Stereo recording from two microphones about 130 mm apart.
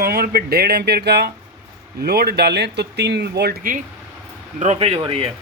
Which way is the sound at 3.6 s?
90° right.